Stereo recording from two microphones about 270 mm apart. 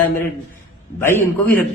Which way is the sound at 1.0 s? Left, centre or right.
Centre.